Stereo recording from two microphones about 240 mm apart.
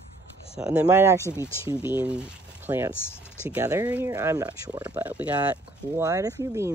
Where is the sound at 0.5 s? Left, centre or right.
Centre.